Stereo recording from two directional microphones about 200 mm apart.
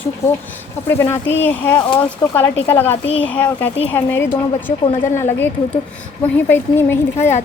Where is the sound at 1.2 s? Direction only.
65° left (ahead or behind).